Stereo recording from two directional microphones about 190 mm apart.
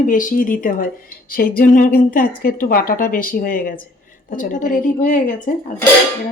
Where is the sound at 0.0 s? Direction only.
45° left (ahead or behind).